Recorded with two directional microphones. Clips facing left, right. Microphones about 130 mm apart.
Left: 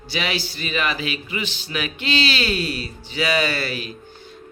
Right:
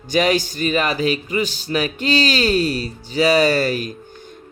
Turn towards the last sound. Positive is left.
turn(degrees=-45)  # may be behind; listen again after turning